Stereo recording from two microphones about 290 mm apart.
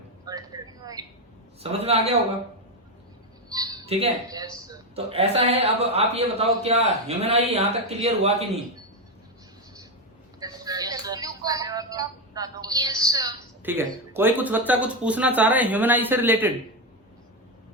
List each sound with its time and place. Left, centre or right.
0.3 s a sound: centre
1.6 s speech: right
3.5 s speech: centre
10.4 s speech: centre